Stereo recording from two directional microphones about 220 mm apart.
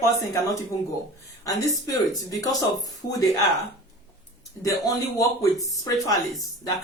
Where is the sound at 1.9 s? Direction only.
15° left (ahead or behind).